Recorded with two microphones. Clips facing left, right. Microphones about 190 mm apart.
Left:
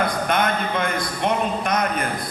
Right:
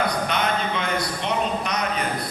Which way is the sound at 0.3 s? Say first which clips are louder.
Left 2 dB; 50° left (ahead or behind).